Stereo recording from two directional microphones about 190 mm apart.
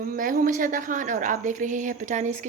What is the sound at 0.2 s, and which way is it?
A woman's voice, 45° right (ahead or behind).